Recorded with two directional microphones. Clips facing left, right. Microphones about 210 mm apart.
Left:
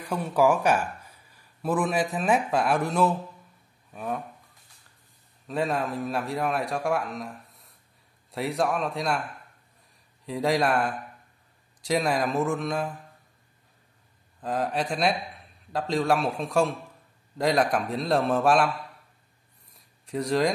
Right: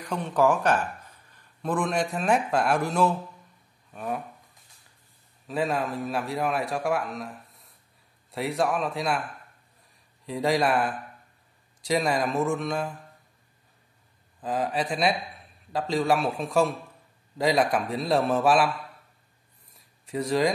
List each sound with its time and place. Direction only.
0.0 s speech: 10° left (ahead or behind)
3.9 s toothbrush: centre (ahead or behind)
5.5 s a man's voice: centre (ahead or behind)
10.2 s a man's voice: centre (ahead or behind)
14.4 s a man's voice: centre (ahead or behind)
19.7 s a sound: centre (ahead or behind)